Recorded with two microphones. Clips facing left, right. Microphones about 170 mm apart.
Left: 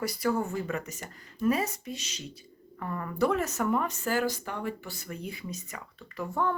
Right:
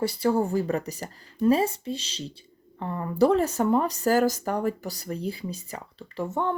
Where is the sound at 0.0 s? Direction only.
30° right (ahead or behind).